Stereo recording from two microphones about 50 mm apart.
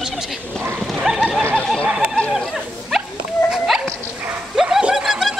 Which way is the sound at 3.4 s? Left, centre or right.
Centre.